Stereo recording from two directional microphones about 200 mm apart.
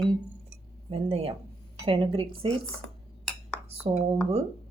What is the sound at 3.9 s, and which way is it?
Speech, 30° right (ahead or behind).